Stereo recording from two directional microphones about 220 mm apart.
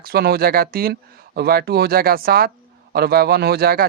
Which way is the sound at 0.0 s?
45° right (ahead or behind).